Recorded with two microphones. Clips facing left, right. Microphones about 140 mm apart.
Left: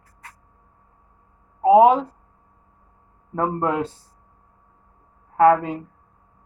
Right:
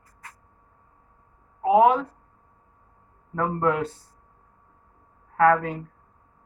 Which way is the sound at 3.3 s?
25° left (ahead or behind).